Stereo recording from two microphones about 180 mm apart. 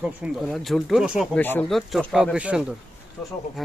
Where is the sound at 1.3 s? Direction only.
10° left (ahead or behind).